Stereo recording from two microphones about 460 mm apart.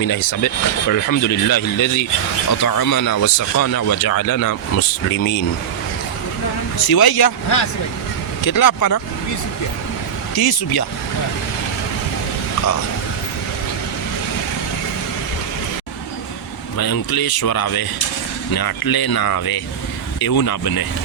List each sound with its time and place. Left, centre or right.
0.2 s speech: left
6.8 s speech: left
10.3 s speech: left
16.7 s speech: left